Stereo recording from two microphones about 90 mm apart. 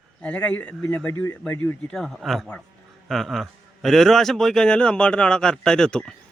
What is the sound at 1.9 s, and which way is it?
A man's voice, 5° left (ahead or behind).